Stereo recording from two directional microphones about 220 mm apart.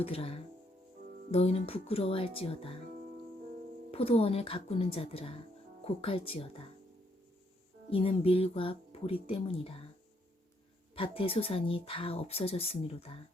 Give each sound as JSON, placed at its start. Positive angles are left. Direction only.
{"t": 0.0, "sound": "speech", "side_deg": 25}
{"t": 3.9, "sound": "speech", "side_deg": 25}
{"t": 7.9, "sound": "speech", "side_deg": 25}
{"t": 10.9, "sound": "speech", "side_deg": 25}